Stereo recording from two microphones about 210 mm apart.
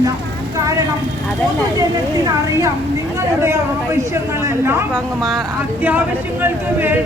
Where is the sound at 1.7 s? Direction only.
15° right (ahead or behind).